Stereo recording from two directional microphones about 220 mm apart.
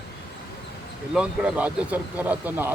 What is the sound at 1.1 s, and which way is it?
Speech, 5° right (ahead or behind).